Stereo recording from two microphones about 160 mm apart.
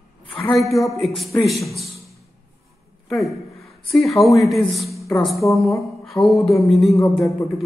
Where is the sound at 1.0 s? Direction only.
Centre (ahead or behind).